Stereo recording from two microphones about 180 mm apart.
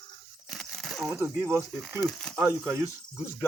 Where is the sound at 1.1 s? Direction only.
15° right (ahead or behind).